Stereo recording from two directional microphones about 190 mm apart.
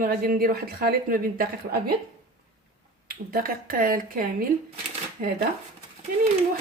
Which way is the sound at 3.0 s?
50° right (ahead or behind).